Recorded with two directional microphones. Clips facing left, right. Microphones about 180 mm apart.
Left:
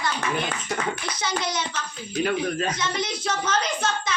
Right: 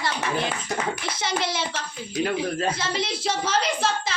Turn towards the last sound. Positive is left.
turn(degrees=-30)  # may be behind; listen again after turning